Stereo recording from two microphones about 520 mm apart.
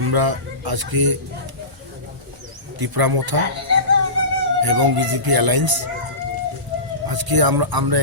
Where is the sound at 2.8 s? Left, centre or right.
Right.